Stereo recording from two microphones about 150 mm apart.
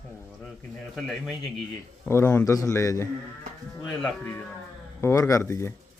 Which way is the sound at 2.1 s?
15° left (ahead or behind).